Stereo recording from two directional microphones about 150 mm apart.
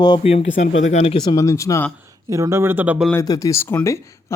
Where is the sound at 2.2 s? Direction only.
20° right (ahead or behind).